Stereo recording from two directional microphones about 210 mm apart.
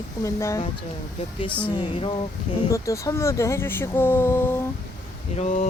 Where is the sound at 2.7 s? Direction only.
15° left (ahead or behind).